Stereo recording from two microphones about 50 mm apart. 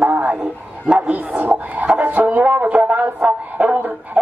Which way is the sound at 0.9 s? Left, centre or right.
Centre.